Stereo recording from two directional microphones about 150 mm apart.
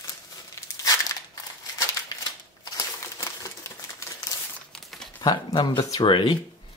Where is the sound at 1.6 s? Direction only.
20° left (ahead or behind).